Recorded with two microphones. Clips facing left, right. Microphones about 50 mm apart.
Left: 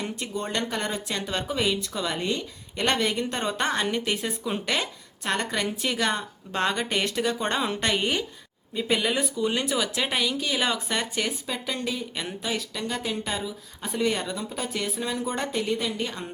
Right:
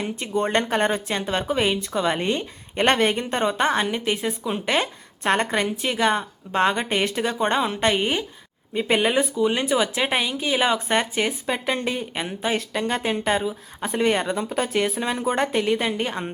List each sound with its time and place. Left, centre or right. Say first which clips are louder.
0.0 s a woman's voice: right 7 dB; right; by 4.6 s centre
4.6 s a woman's voice: right 5 dB; right
5.6 s speech: right 4 dB; centre
8.7 s speech: right 5 dB; right
11.4 s speech: right 6 dB; right
12.1 s speech: right 5 dB; right
15.9 s speech: right 5 dB; right